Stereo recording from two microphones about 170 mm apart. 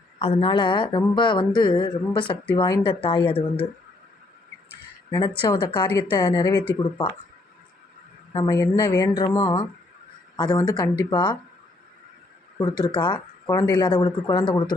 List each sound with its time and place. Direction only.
0.2 s speech: 35° left (ahead or behind)
5.4 s speech: 25° left (ahead or behind)
8.3 s speech: 20° left (ahead or behind)
12.5 s speech: 20° left (ahead or behind)